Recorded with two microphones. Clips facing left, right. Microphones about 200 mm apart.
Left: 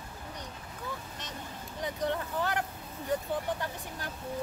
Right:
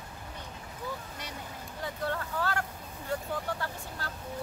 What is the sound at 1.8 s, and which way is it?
Vehicle, 20° left (ahead or behind).